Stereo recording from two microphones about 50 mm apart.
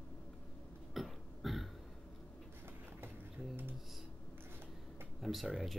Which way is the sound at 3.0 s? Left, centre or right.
Right.